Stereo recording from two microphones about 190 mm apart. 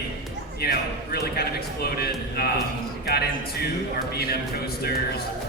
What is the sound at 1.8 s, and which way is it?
A man's voice, 55° left (ahead or behind).